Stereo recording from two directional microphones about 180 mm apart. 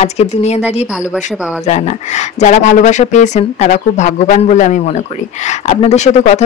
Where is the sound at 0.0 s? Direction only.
35° left (ahead or behind).